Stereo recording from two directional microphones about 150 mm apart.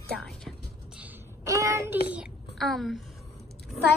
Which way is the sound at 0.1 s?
5° left (ahead or behind).